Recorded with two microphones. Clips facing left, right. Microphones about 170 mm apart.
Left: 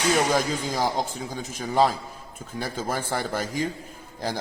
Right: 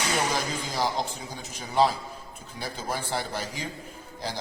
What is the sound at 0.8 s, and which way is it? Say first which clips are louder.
A man's voice: even; 45° left (ahead or behind).